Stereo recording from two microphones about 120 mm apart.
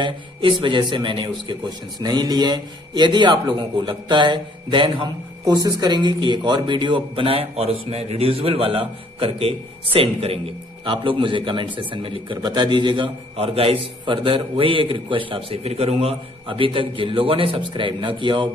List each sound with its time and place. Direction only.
0.0 s a man's voice: 40° right (ahead or behind)
5.4 s a man's voice: 30° right (ahead or behind)